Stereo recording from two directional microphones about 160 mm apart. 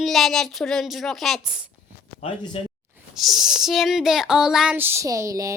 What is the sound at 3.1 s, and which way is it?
Speech, centre (ahead or behind).